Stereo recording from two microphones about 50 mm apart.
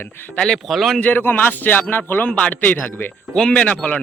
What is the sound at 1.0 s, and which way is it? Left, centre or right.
A man's voice, left.